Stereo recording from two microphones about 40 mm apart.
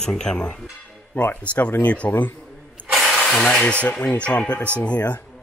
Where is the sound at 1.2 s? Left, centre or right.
Left.